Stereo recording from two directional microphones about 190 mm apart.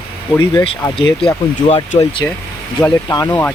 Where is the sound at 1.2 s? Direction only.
30° left (ahead or behind).